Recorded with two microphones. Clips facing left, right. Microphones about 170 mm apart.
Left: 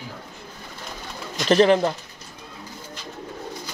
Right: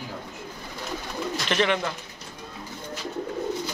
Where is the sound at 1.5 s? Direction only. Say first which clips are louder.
Left 9 dB; 35° left (ahead or behind).